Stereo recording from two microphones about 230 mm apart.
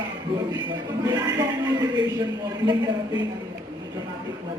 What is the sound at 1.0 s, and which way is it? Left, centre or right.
Speech, centre.